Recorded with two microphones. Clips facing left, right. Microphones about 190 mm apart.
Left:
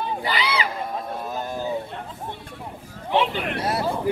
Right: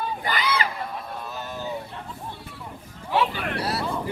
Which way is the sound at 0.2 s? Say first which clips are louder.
Even; 50° right (ahead or behind).